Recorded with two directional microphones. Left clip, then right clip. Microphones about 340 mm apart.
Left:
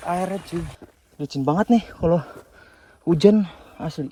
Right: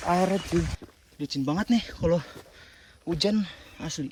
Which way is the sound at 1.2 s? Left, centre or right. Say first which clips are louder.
Left 7 dB; centre.